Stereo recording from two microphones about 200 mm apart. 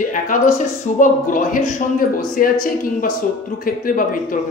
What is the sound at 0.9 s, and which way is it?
A man's voice, 45° left (ahead or behind).